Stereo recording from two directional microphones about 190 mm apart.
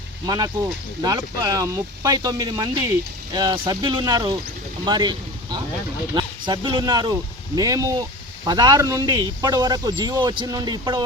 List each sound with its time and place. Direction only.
0.3 s speech: 20° right (ahead or behind)